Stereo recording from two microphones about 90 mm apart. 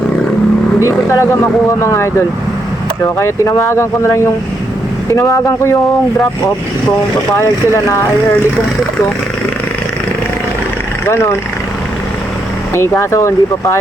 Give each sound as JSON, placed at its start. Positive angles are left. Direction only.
{"t": 0.9, "sound": "speech", "side_deg": 35}
{"t": 7.3, "sound": "speech", "side_deg": 35}
{"t": 11.0, "sound": "speech", "side_deg": 30}
{"t": 12.7, "sound": "speech", "side_deg": 30}